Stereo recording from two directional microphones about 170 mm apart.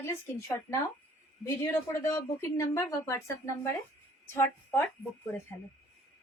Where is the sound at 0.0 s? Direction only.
15° left (ahead or behind).